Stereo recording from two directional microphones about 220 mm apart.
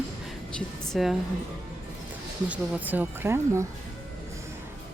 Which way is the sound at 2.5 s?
10° right (ahead or behind).